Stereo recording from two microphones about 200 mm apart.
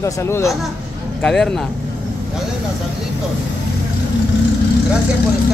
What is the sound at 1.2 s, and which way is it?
Speech, 5° left (ahead or behind).